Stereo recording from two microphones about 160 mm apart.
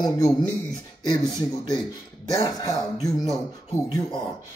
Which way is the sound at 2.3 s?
20° left (ahead or behind).